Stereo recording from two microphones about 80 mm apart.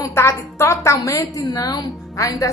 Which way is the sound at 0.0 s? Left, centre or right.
Left.